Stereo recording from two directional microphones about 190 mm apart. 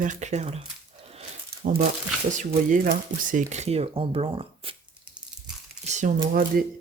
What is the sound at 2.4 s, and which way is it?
Speech, 45° right (ahead or behind).